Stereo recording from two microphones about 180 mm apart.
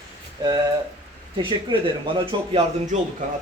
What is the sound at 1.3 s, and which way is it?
Speech, 25° right (ahead or behind).